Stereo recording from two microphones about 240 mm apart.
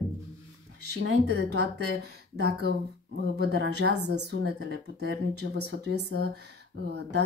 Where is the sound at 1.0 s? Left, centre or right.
Right.